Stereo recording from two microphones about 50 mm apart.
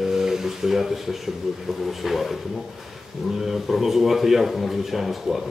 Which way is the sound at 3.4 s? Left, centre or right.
Centre.